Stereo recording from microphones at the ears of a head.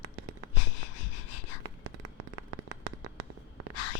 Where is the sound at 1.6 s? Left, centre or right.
Right.